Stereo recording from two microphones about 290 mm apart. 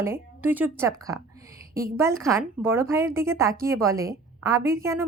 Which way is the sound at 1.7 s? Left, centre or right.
Right.